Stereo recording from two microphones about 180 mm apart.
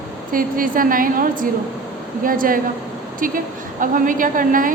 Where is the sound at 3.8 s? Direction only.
50° right (ahead or behind).